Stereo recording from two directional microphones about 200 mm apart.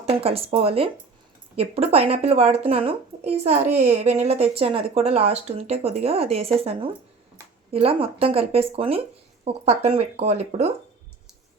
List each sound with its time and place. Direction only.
0.0 s speech: 30° right (ahead or behind)